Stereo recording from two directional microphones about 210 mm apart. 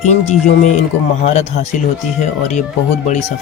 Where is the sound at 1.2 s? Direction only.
35° left (ahead or behind).